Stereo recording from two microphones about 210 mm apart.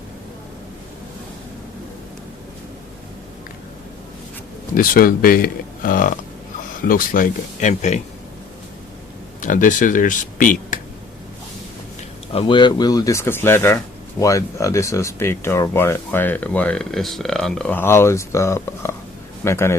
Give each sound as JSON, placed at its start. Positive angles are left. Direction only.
{"t": 4.7, "sound": "speech", "side_deg": 45}
{"t": 9.4, "sound": "speech", "side_deg": 40}
{"t": 12.3, "sound": "speech", "side_deg": 25}